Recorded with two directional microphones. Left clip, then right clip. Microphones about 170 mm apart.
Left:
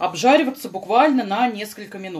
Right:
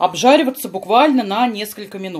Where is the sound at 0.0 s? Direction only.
30° right (ahead or behind).